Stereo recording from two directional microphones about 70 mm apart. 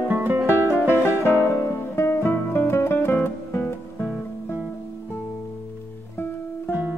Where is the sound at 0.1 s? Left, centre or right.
Right.